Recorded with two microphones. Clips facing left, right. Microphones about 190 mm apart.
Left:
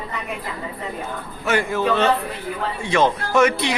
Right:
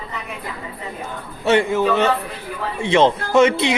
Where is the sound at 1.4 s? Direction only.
25° right (ahead or behind).